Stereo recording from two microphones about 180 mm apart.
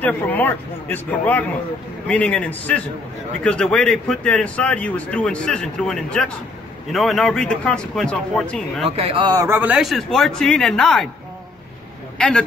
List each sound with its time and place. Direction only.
0.0 s a man's voice: 10° left (ahead or behind)
8.8 s a man's voice: 35° right (ahead or behind); by 11.1 s 5° left (ahead or behind)
12.2 s a man's voice: 5° left (ahead or behind)